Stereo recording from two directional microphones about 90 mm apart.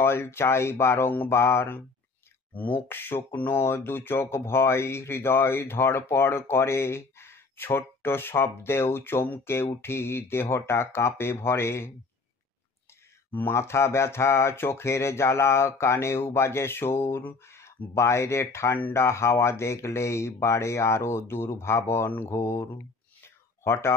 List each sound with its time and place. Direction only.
0.0 s speech: 25° left (ahead or behind)
13.3 s speech: 25° left (ahead or behind)
23.2 s a sound: 30° left (ahead or behind)